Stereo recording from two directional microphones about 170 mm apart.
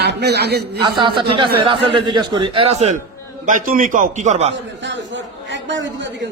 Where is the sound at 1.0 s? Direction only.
30° right (ahead or behind).